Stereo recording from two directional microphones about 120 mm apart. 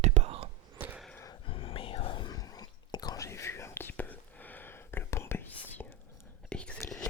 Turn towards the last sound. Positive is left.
turn(degrees=10)  # may be behind; listen again after turning